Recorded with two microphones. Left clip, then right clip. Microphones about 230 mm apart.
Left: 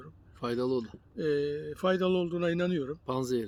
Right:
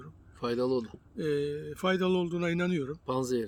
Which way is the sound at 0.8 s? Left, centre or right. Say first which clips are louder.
Left 1 dB; centre.